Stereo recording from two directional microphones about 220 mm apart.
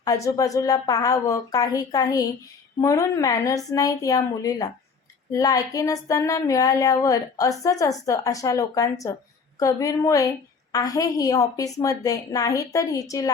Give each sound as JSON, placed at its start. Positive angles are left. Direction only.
{"t": 0.0, "sound": "speech", "side_deg": 15}